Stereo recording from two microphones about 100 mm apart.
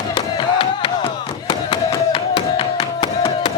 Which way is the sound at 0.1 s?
60° left (ahead or behind).